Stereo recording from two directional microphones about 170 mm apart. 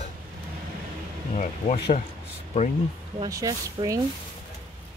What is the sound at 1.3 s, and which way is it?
Speech, 40° left (ahead or behind).